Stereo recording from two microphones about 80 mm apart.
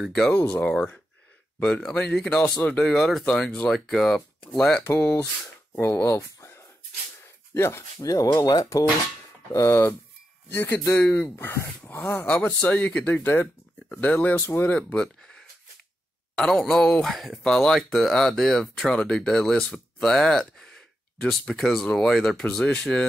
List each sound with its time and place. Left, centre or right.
0.0 s speech: centre
0.3 s speech: centre
2.8 s speech: centre
4.8 s speech: left
8.1 s speech: left
9.5 s speech: left
12.1 s speech: centre
14.8 s speech: centre